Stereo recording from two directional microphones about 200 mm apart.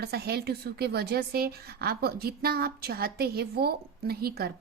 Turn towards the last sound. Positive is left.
turn(degrees=-50)  # may be behind; listen again after turning